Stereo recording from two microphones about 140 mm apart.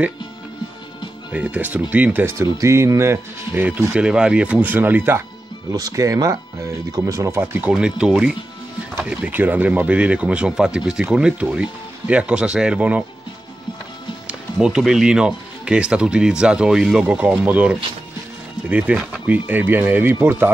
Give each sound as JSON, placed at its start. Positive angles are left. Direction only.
{"t": 1.3, "sound": "speech", "side_deg": -10}
{"t": 5.7, "sound": "speech", "side_deg": -25}
{"t": 14.2, "sound": "speech", "side_deg": -5}